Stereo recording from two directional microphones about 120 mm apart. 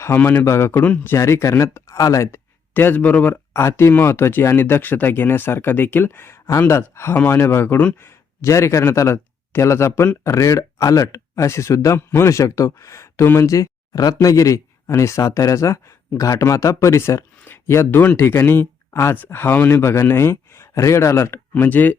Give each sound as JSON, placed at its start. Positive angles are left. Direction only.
{"t": 0.0, "sound": "a man's voice", "side_deg": 20}